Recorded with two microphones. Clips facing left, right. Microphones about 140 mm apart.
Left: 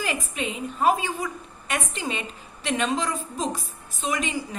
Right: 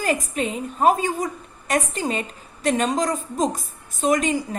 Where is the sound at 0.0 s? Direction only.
45° right (ahead or behind).